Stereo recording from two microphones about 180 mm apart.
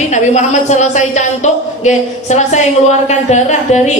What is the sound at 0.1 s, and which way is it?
A woman's voice, 40° left (ahead or behind).